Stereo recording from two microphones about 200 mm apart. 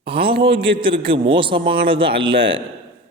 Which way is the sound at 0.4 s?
25° right (ahead or behind).